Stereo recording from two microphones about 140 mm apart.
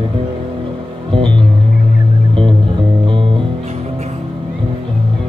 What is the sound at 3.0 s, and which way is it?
Music, 35° right (ahead or behind).